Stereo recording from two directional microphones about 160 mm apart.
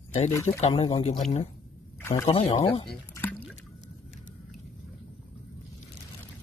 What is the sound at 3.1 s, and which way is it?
Liquid, 15° left (ahead or behind).